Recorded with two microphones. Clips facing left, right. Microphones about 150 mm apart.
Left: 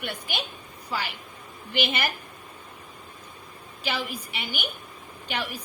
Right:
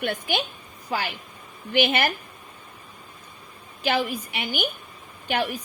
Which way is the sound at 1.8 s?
50° right (ahead or behind).